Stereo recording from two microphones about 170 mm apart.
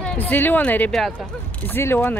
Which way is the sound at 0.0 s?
5° left (ahead or behind).